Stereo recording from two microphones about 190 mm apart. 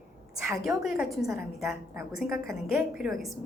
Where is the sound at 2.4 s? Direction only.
Centre (ahead or behind).